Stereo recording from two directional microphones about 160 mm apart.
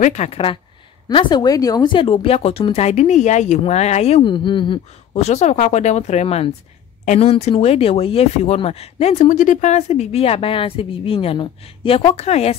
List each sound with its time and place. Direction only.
0.0 s speech: 45° left (ahead or behind)
1.0 s speech: 25° left (ahead or behind); by 12.5 s 40° left (ahead or behind)